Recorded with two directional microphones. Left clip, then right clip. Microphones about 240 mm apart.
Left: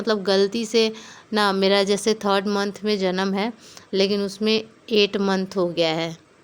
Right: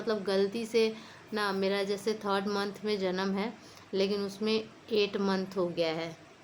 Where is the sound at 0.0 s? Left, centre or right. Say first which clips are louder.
Left 10 dB; left.